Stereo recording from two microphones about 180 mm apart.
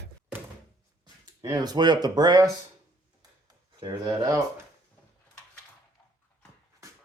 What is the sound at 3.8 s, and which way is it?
Speech, 20° right (ahead or behind).